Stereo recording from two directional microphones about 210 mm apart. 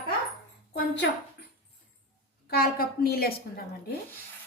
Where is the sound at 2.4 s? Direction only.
45° left (ahead or behind).